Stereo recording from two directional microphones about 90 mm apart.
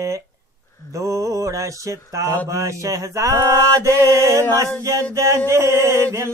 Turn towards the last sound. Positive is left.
turn(degrees=-30)  # may be behind; listen again after turning